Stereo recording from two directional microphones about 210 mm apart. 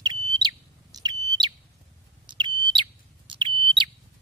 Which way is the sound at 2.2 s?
20° right (ahead or behind).